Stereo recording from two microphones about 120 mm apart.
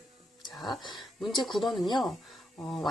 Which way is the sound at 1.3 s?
40° left (ahead or behind).